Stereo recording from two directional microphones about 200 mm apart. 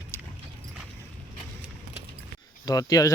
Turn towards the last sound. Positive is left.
turn(degrees=15)  # may be behind; listen again after turning